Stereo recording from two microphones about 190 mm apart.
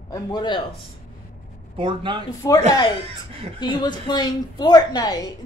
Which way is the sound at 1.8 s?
25° right (ahead or behind).